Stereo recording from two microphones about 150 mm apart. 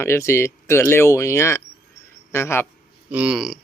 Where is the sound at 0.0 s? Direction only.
20° left (ahead or behind).